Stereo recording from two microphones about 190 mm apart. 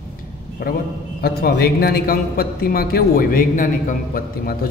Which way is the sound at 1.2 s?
55° left (ahead or behind).